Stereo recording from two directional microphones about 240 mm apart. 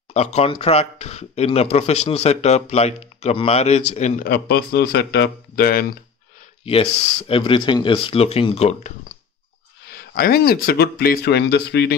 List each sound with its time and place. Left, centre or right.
0.1 s speech: left
6.6 s speech: left
9.8 s speech: left